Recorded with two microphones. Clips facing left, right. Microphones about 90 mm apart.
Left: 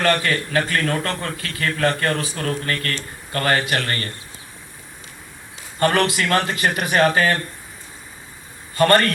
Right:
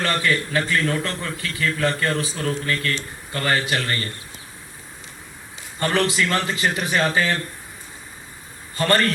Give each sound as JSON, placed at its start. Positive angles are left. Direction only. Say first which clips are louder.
{"t": 0.0, "sound": "a man's voice", "louder": "left 2 dB", "side_deg": 55}
{"t": 5.8, "sound": "a man's voice", "louder": "left 2 dB", "side_deg": 55}
{"t": 8.8, "sound": "a man's voice", "louder": "left 4 dB", "side_deg": 60}